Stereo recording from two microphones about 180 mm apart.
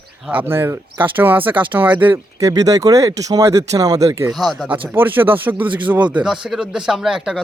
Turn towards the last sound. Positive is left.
turn(degrees=-5)  # may be behind; listen again after turning